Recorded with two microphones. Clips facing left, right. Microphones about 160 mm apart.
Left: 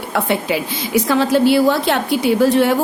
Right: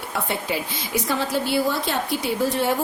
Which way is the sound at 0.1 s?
80° left.